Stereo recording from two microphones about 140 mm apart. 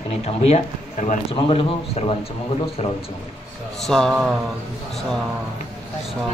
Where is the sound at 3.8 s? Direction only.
5° left (ahead or behind).